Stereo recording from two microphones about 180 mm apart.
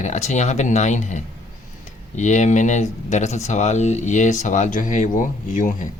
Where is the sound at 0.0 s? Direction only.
40° left (ahead or behind).